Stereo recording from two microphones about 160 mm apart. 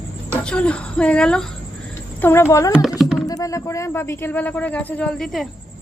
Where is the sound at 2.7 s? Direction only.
5° right (ahead or behind).